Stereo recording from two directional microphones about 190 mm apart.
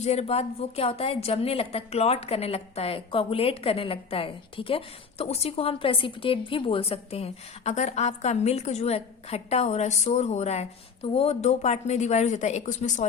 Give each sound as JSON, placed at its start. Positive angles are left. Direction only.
{"t": 0.0, "sound": "a woman's voice", "side_deg": 35}